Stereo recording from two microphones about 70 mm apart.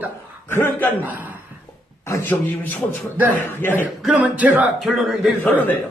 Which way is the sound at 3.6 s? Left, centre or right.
Left.